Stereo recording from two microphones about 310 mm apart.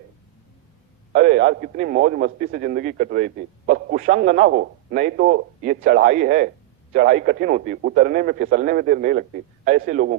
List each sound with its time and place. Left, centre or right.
1.1 s a man's voice: right